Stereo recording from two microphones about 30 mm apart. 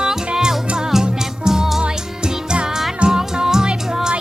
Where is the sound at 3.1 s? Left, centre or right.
Centre.